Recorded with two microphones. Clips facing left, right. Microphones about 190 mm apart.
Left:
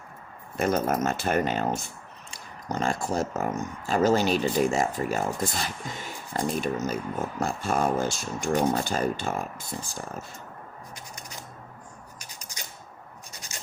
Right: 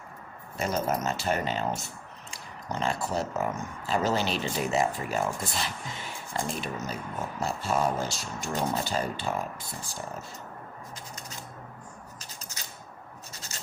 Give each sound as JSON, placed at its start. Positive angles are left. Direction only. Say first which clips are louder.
{"t": 0.5, "sound": "speech", "louder": "left 4 dB", "side_deg": 55}
{"t": 12.2, "sound": "typewriter", "louder": "left 1 dB", "side_deg": 15}